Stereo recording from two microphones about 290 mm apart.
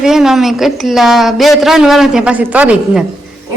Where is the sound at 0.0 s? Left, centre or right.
Centre.